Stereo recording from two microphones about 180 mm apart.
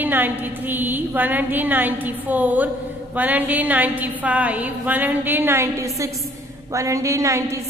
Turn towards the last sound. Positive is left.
turn(degrees=-15)  # may be behind; listen again after turning